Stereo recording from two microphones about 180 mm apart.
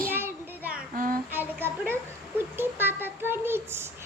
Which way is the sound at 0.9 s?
50° right (ahead or behind).